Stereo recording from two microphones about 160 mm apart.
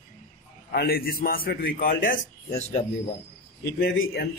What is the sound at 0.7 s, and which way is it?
A man's voice, 70° left (ahead or behind).